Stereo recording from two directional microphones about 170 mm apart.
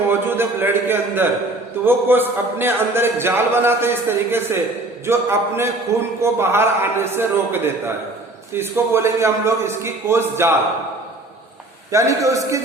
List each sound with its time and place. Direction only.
0.1 s a sound: 10° right (ahead or behind)
1.8 s a man's voice: 10° right (ahead or behind)
11.9 s a man's voice: 20° right (ahead or behind)